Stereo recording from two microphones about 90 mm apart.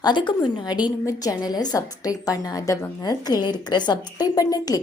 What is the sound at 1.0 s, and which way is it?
A woman's voice, 45° left (ahead or behind).